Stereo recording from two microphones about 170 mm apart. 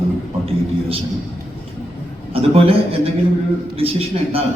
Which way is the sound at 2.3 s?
35° right (ahead or behind).